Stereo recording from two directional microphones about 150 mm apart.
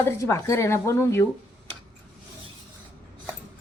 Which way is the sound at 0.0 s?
15° left (ahead or behind).